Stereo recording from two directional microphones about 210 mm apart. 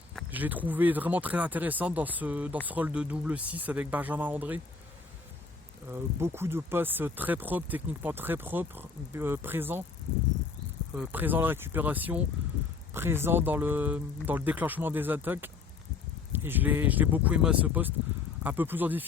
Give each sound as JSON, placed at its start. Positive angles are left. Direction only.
{"t": 0.3, "sound": "speech", "side_deg": -10}
{"t": 5.9, "sound": "speech", "side_deg": -10}
{"t": 10.9, "sound": "speech", "side_deg": -10}